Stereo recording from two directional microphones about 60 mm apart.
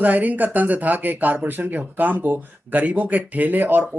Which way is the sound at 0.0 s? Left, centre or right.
Right.